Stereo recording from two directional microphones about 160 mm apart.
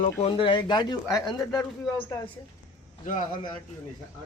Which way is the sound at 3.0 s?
55° left (ahead or behind).